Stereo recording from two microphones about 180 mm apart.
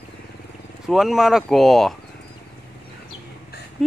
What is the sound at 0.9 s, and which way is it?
Speech, centre (ahead or behind).